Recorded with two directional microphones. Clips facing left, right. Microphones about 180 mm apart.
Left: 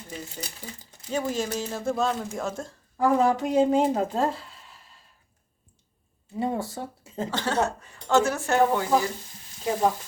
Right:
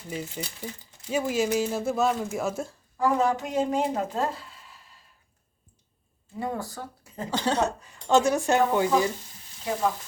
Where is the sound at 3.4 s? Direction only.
35° left (ahead or behind).